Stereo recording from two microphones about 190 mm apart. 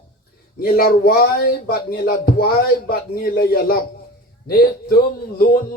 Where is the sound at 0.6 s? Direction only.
50° left (ahead or behind).